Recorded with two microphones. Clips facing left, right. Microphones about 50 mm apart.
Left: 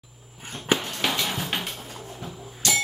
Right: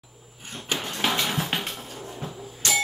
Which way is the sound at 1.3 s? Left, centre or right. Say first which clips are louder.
Right 2 dB; centre.